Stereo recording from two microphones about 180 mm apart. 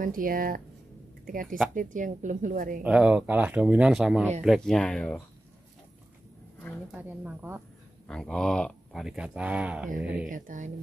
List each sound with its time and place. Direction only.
0.0 s a woman's voice: 50° right (ahead or behind)
2.8 s speech: 5° right (ahead or behind)
6.9 s speech: 10° right (ahead or behind)
8.1 s speech: 5° left (ahead or behind)
10.2 s a woman's voice: 45° right (ahead or behind)